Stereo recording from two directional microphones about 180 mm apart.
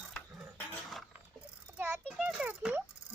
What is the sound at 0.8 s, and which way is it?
Mechanisms, centre (ahead or behind).